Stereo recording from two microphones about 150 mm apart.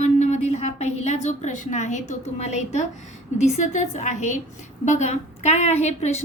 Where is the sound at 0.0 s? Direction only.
50° left (ahead or behind).